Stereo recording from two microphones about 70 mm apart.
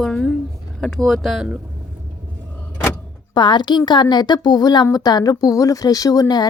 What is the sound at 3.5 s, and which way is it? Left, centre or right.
A woman's voice, left.